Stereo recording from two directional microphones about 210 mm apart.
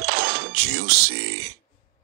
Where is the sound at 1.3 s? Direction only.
90° right.